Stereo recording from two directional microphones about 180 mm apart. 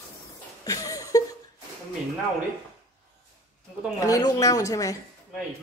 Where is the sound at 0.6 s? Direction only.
20° left (ahead or behind).